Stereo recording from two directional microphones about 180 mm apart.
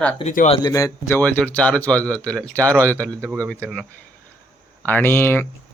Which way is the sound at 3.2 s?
15° right (ahead or behind).